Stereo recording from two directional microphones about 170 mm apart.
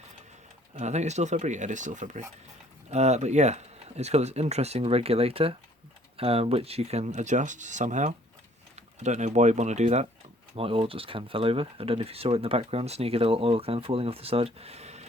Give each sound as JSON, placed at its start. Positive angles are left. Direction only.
{"t": 0.8, "sound": "speech", "side_deg": -40}